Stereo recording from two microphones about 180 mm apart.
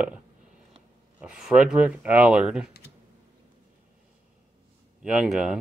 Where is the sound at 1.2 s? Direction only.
5° right (ahead or behind).